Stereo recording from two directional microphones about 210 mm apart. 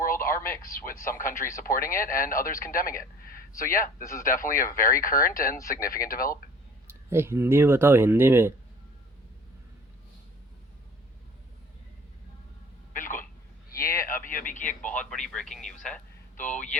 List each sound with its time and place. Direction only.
0.3 s speech: 10° left (ahead or behind)
1.6 s a man's voice: 45° left (ahead or behind)
4.0 s speech: 15° left (ahead or behind)
4.3 s speech: 40° left (ahead or behind)
5.5 s speech: 15° left (ahead or behind)
5.8 s speech: 45° left (ahead or behind)
6.8 s speech: 10° right (ahead or behind)
12.9 s telephone: 40° left (ahead or behind)
13.7 s speech: 15° left (ahead or behind)
14.0 s speech: 40° left (ahead or behind)
14.8 s a man's voice: 5° left (ahead or behind)